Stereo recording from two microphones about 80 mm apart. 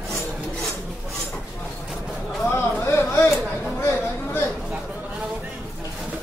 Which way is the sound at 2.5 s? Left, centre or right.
Left.